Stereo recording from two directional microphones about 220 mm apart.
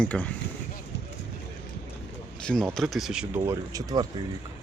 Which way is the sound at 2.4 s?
5° left (ahead or behind).